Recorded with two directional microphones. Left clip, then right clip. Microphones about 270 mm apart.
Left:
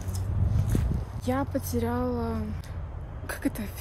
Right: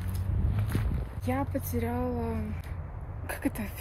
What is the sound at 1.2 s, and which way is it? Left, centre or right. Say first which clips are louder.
Speech: left 3 dB; centre.